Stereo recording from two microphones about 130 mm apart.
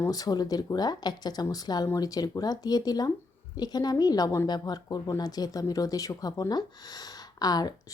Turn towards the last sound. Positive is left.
turn(degrees=30)  # may be behind; listen again after turning